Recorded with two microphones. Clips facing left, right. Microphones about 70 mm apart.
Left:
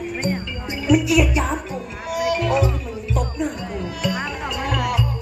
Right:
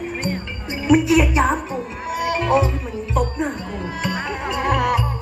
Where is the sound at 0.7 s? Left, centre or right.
Right.